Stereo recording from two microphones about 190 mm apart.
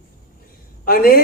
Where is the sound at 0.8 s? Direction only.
50° left (ahead or behind).